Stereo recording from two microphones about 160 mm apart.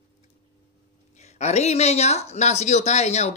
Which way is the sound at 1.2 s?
45° left (ahead or behind).